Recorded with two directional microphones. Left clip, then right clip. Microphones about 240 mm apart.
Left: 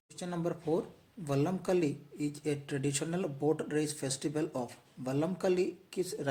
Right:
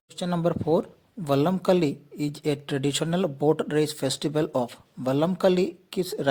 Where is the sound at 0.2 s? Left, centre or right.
Right.